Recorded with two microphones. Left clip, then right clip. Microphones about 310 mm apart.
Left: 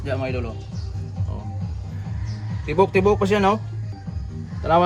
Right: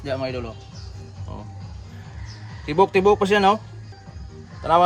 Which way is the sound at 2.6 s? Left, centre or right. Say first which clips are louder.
Right 1 dB; right.